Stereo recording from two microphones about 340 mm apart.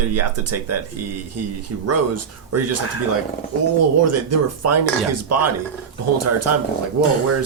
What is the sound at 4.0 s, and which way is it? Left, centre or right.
Speech, right.